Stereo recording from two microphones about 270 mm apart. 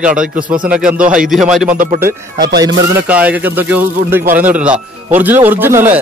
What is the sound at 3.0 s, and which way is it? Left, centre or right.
A man's voice, centre.